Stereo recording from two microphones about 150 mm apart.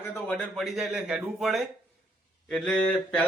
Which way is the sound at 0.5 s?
Centre (ahead or behind).